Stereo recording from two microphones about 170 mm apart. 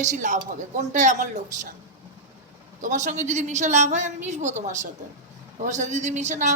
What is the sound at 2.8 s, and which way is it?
A woman's voice, 45° right (ahead or behind).